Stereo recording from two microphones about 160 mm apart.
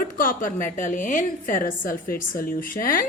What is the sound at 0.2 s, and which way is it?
A woman's voice, 60° left (ahead or behind).